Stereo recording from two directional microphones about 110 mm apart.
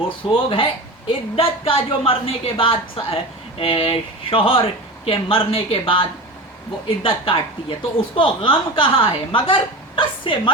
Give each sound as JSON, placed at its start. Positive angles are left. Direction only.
{"t": 0.3, "sound": "a woman's voice", "side_deg": 55}